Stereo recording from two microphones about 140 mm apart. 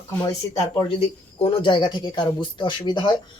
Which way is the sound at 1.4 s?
35° left (ahead or behind).